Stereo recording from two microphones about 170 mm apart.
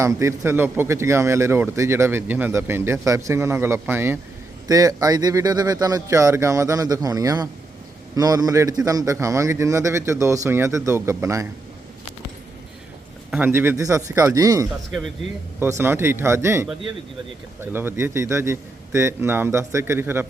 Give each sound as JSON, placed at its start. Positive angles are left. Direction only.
{"t": 0.0, "sound": "a man's voice", "side_deg": -20}
{"t": 13.3, "sound": "a man's voice", "side_deg": -10}
{"t": 15.8, "sound": "a man's voice", "side_deg": -15}